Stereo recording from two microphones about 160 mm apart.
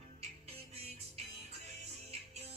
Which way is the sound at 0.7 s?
40° right (ahead or behind).